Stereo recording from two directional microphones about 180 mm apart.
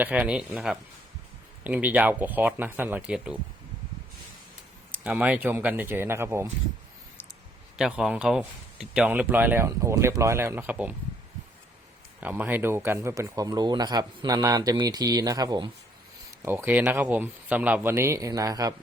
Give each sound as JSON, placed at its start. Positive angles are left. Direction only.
{"t": 0.0, "sound": "speech", "side_deg": -10}
{"t": 4.9, "sound": "speech", "side_deg": -10}
{"t": 7.8, "sound": "speech", "side_deg": -5}
{"t": 12.2, "sound": "speech", "side_deg": -10}